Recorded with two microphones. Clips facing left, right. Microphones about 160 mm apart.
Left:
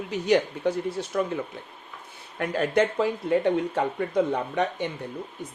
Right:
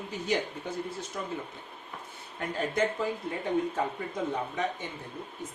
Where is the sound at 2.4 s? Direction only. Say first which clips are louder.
Left 6 dB; 75° left (ahead or behind).